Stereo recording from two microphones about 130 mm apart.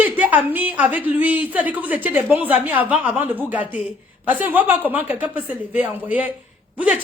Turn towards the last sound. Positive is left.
turn(degrees=-10)  # may be behind; listen again after turning